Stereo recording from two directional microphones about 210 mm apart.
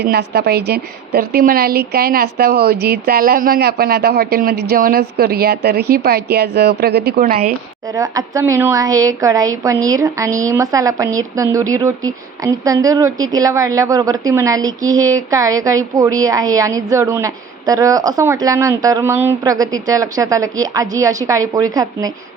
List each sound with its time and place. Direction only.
0.0 s a woman's voice: 50° right (ahead or behind)
7.9 s a woman's voice: 15° right (ahead or behind)